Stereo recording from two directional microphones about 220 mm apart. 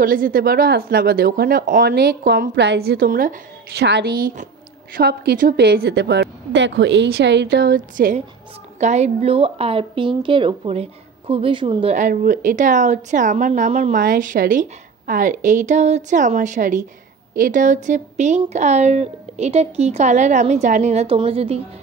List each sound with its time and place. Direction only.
0.0 s a woman's voice: 40° right (ahead or behind)